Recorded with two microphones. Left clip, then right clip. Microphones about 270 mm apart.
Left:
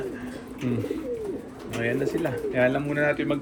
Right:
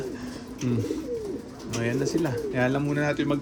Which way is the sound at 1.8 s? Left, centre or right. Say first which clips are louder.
Left 1 dB; centre.